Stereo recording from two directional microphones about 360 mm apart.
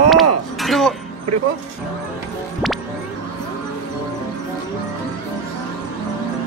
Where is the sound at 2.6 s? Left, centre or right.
Centre.